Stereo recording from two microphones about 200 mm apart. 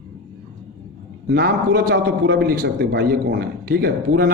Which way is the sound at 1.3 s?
50° right (ahead or behind).